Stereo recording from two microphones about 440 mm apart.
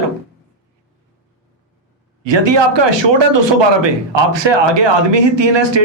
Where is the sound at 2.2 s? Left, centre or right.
Right.